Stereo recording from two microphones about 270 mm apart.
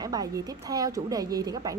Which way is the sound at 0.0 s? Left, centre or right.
Centre.